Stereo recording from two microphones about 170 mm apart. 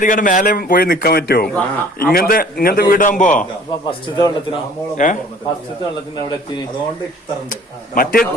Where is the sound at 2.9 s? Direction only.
50° left (ahead or behind).